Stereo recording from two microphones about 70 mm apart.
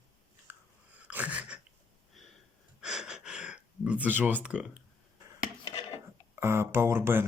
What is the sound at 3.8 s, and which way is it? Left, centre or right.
Speech, right.